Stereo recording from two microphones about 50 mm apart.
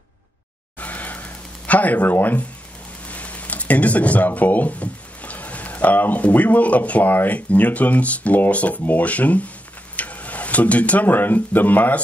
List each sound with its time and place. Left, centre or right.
0.7 s music: left
1.7 s speech: left